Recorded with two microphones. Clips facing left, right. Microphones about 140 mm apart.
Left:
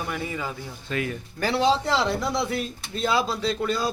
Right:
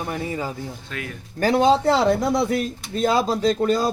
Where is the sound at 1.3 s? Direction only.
45° right (ahead or behind).